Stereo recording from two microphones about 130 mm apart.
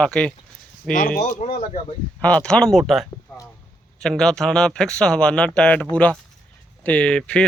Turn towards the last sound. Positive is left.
turn(degrees=5)  # may be behind; listen again after turning